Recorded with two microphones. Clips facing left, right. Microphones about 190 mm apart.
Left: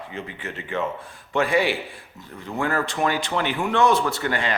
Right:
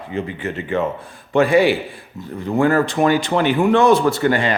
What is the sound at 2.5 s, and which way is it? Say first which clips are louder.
Speech: right 9 dB; 35° right (ahead or behind).